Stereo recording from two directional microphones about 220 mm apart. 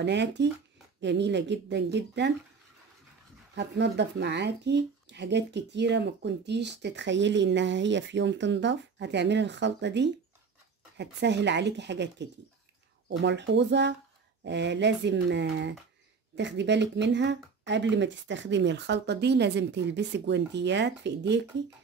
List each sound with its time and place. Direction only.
0.0 s speech: 50° right (ahead or behind)
3.5 s speech: 50° right (ahead or behind)